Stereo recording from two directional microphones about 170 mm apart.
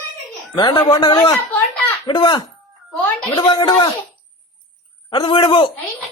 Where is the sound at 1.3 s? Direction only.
10° left (ahead or behind).